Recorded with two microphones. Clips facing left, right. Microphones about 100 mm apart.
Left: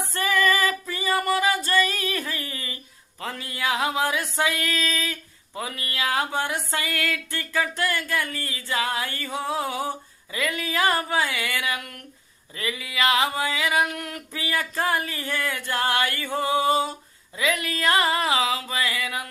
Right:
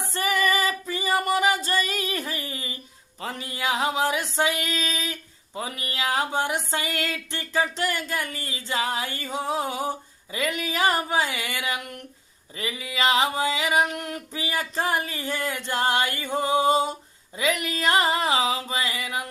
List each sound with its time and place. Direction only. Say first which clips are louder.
0.0 s female singing: left 1 dB; 20° right (ahead or behind)